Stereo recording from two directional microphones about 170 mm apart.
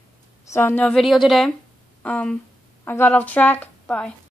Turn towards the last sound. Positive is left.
turn(degrees=10)  # may be behind; listen again after turning